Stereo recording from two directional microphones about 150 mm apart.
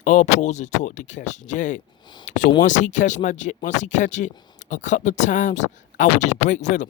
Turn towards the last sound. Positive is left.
turn(degrees=55)  # may be behind; listen again after turning